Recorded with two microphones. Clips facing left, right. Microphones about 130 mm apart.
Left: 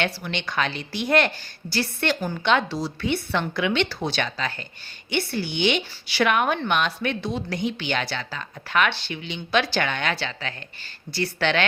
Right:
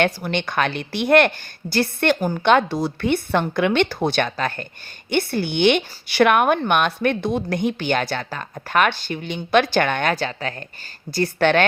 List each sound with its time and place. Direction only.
0.0 s a woman's voice: 50° right (ahead or behind)